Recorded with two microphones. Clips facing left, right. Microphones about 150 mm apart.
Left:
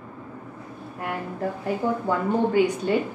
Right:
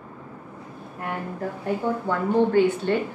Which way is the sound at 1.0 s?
Centre (ahead or behind).